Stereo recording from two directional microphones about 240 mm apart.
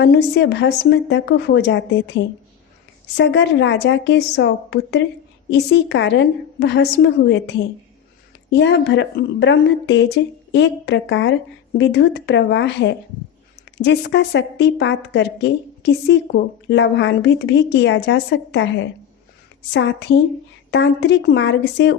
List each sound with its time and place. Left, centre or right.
0.0 s a woman's voice: left
8.5 s a woman's voice: left
19.7 s a woman's voice: left